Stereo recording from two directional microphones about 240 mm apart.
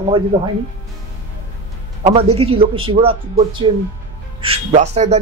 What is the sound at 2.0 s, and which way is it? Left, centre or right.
Speech, right.